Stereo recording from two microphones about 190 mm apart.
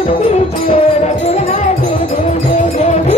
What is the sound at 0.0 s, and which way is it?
Music, 35° left (ahead or behind).